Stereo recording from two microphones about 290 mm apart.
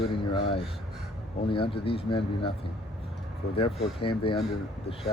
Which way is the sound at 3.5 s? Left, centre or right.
Centre.